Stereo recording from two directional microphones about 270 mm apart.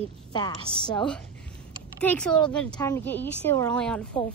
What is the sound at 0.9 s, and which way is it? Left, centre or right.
A woman's voice, centre.